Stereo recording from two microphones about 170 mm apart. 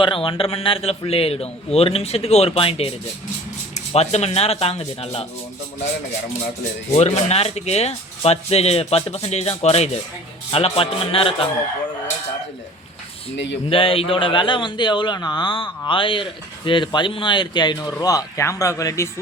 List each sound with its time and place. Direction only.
0.0 s speech: 30° left (ahead or behind)
6.9 s speech: 40° left (ahead or behind)
13.3 s speech: 90° left
13.7 s a man's voice: 30° left (ahead or behind)